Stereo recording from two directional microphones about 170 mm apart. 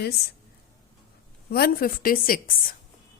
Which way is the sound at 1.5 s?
65° left (ahead or behind).